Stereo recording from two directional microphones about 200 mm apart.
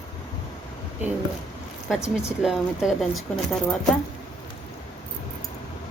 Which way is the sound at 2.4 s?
Centre (ahead or behind).